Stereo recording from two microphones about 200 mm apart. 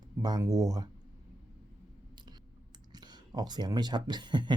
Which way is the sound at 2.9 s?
20° right (ahead or behind).